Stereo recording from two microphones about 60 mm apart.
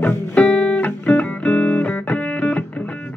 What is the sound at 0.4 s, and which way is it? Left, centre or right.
Music, left.